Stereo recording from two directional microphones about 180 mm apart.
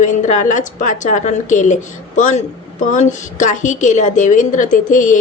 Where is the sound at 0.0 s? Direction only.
45° left (ahead or behind).